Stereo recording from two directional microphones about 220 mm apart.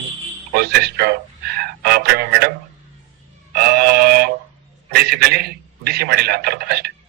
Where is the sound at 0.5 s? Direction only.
45° right (ahead or behind).